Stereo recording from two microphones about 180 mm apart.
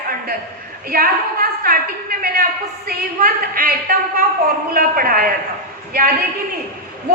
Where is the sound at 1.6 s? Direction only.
55° right (ahead or behind).